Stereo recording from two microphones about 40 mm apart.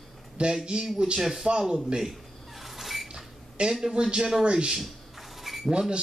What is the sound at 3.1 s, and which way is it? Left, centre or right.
Cash register, centre.